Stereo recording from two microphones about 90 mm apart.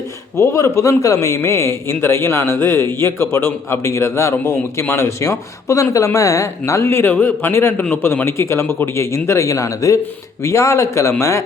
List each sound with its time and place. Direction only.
0.3 s a man's voice: 35° left (ahead or behind)